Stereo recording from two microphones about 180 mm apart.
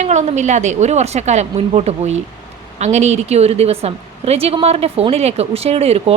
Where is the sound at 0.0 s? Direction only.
40° right (ahead or behind).